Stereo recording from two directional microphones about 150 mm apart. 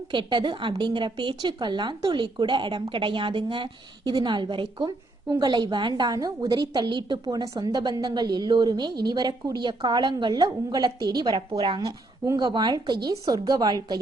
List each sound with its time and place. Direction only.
0.1 s a woman's voice: 30° right (ahead or behind)
12.2 s a woman's voice: 25° right (ahead or behind)